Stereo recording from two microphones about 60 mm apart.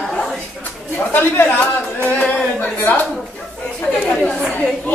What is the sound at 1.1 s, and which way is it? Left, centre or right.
Speech, left.